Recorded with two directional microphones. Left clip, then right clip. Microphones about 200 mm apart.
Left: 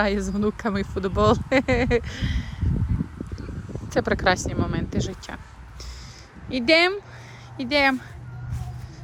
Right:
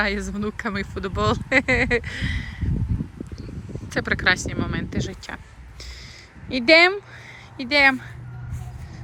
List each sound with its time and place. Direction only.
0.0 s speech: 20° left (ahead or behind)
3.7 s speech: 20° left (ahead or behind)
6.5 s speech: 10° left (ahead or behind)